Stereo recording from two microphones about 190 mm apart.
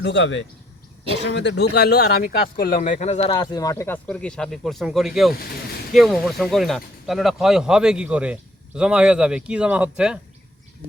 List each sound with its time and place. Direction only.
0.0 s speech: 70° left (ahead or behind); by 3.3 s 35° left (ahead or behind)
3.3 s speech: 20° left (ahead or behind); by 10.2 s 5° right (ahead or behind)